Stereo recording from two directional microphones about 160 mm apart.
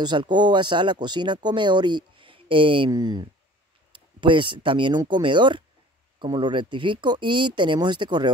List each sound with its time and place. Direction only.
0.0 s speech: 30° right (ahead or behind)